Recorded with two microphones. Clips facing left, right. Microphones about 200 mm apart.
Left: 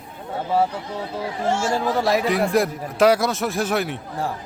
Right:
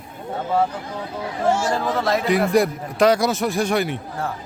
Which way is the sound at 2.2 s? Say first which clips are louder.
Right 2 dB; centre (ahead or behind).